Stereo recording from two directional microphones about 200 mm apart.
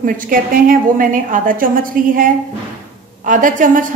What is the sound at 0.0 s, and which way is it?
A woman's voice, 45° right (ahead or behind).